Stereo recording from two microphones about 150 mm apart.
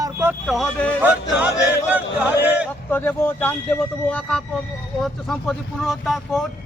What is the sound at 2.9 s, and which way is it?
Speech, 10° left (ahead or behind).